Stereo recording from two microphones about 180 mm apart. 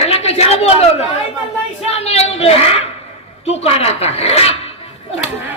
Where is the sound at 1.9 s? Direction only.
35° left (ahead or behind).